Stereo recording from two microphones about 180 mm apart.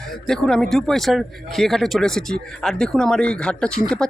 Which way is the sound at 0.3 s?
Centre (ahead or behind).